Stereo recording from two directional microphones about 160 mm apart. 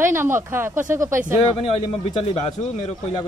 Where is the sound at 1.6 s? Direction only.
35° left (ahead or behind).